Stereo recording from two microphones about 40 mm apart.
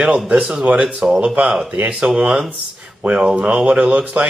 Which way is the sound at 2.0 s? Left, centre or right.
Right.